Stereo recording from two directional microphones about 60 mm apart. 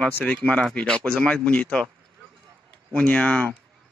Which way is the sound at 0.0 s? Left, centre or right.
Centre.